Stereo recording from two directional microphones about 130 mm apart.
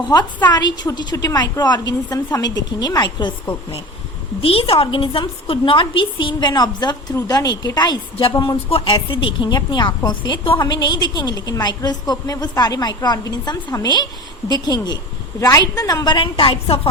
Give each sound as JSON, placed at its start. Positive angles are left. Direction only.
{"t": 0.5, "sound": "a woman's voice", "side_deg": 30}
{"t": 4.4, "sound": "a woman's voice", "side_deg": 45}